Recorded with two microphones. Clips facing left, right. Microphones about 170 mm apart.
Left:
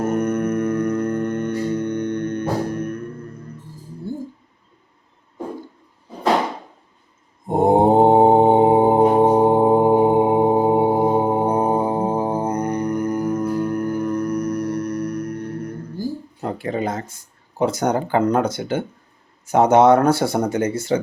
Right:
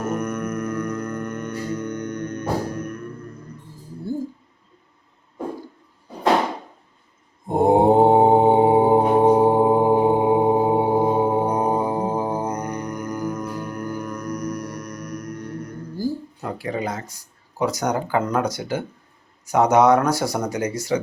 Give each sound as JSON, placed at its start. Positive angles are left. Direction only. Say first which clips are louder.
{"t": 0.0, "sound": "music", "louder": "left 5 dB", "side_deg": 30}
{"t": 7.4, "sound": "mantra", "louder": "left 1 dB", "side_deg": 20}
{"t": 16.4, "sound": "a sound", "louder": "left 4 dB", "side_deg": 25}
{"t": 17.6, "sound": "speech", "louder": "left 3 dB", "side_deg": 30}